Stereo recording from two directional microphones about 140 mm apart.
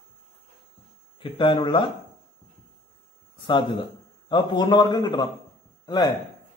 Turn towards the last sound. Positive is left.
turn(degrees=30)  # may be behind; listen again after turning